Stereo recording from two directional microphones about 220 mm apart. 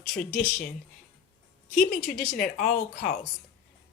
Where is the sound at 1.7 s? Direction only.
35° left (ahead or behind).